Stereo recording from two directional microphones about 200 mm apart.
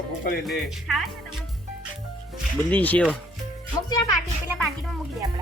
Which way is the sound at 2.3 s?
5° left (ahead or behind).